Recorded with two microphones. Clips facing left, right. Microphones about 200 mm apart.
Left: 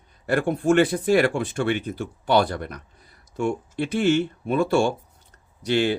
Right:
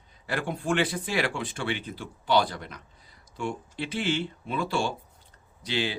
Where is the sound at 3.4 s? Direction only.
50° left (ahead or behind).